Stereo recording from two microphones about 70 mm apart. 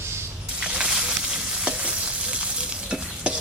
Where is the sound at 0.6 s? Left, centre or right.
Centre.